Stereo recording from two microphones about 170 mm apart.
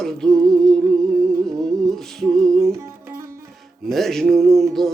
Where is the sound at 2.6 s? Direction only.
15° right (ahead or behind).